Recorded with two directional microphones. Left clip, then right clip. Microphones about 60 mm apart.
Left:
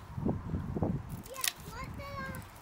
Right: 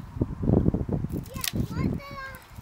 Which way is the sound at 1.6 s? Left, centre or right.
Right.